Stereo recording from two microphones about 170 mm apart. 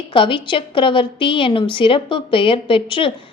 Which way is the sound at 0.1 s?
30° left (ahead or behind).